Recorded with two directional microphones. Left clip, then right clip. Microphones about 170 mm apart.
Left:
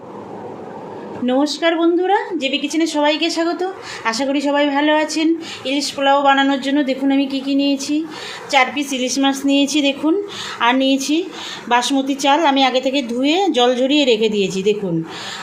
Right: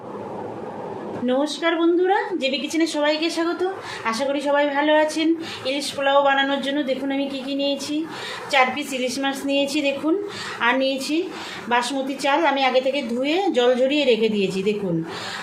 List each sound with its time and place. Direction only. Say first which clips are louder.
1.2 s a woman's voice: left 5 dB; 50° left (ahead or behind)